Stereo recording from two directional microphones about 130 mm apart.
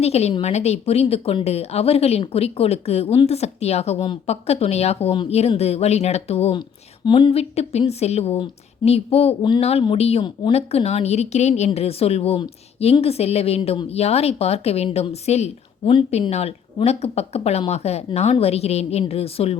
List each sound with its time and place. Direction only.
0.0 s speech: 55° left (ahead or behind)
6.6 s a woman's voice: 35° left (ahead or behind)